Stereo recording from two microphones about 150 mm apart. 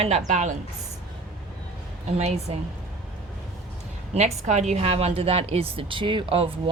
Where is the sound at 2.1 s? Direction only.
45° right (ahead or behind).